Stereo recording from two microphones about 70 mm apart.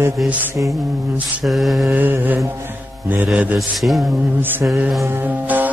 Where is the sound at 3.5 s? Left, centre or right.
Centre.